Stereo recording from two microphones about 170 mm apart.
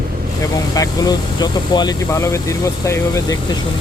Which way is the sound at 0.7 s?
20° left (ahead or behind).